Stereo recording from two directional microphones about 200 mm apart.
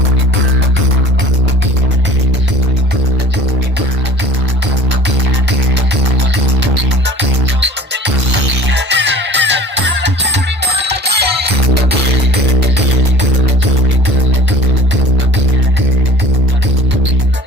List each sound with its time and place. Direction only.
7.2 s music: 60° right (ahead or behind)